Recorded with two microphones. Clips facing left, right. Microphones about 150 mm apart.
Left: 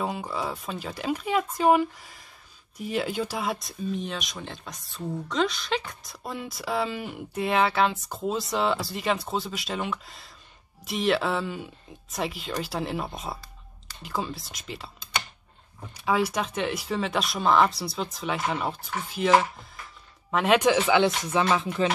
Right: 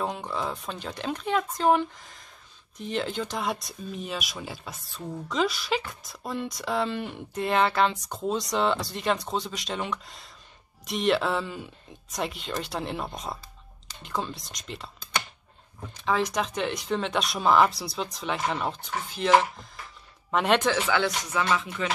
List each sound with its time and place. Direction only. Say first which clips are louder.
0.0 s speech: even; 5° left (ahead or behind)
15.9 s speech: left 1 dB; 10° left (ahead or behind)
20.6 s speech: left 4 dB; 15° left (ahead or behind)